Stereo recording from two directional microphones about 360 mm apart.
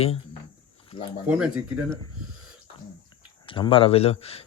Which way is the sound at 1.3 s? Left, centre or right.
Centre.